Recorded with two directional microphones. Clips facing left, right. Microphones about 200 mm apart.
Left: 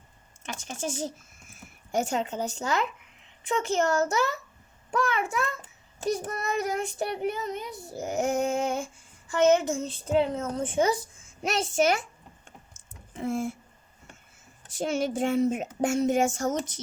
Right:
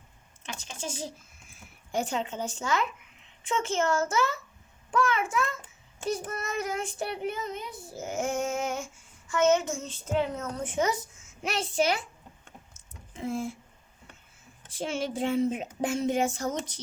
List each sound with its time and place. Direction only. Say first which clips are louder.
0.4 s speech: left 4 dB; 50° left (ahead or behind)
1.9 s female singing: left 3 dB; 45° left (ahead or behind)
13.1 s speech: left 3 dB; 50° left (ahead or behind)
14.7 s speech: left 4 dB; 45° left (ahead or behind)